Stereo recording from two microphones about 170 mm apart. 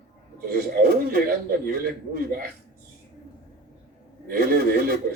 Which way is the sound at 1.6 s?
60° right (ahead or behind).